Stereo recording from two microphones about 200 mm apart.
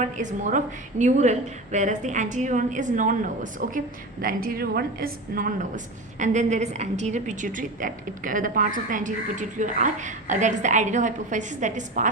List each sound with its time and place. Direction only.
0.0 s a woman's voice: 40° right (ahead or behind)